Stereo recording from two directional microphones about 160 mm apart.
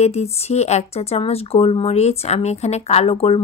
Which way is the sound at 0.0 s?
40° left (ahead or behind).